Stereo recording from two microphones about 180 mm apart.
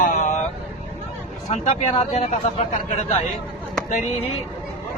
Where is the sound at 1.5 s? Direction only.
35° left (ahead or behind).